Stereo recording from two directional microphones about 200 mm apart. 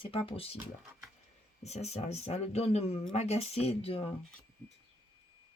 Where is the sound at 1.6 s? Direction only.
35° left (ahead or behind).